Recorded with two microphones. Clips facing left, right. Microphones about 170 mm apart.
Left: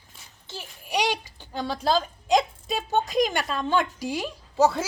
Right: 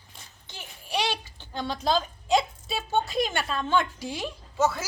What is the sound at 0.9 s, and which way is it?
A child's voice, 15° left (ahead or behind).